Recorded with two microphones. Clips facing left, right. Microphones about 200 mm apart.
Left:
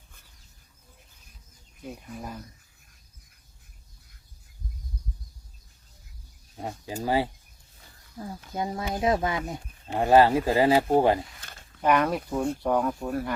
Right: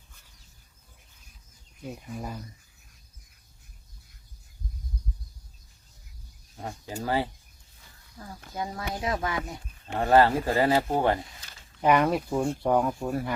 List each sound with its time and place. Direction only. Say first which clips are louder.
2.0 s speech: right 1 dB; 5° right (ahead or behind)
6.6 s speech: left 2 dB; 15° left (ahead or behind)
8.5 s speech: left 3 dB; 20° left (ahead or behind)
11.3 s a sound: left 3 dB; 55° left (ahead or behind)
11.8 s speech: right 1 dB; 10° right (ahead or behind)